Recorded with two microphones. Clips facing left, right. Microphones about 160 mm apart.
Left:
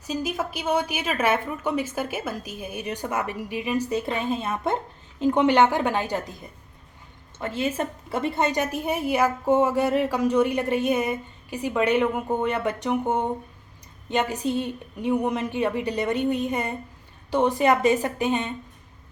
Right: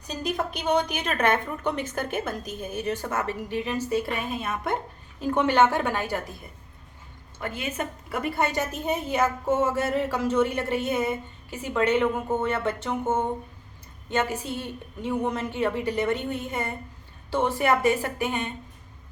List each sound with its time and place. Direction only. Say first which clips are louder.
0.1 s a woman's voice: left 1 dB; 5° left (ahead or behind)
7.3 s a woman's voice: left 5 dB; 25° left (ahead or behind)